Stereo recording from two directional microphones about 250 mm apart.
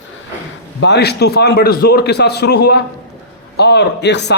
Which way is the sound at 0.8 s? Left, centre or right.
Left.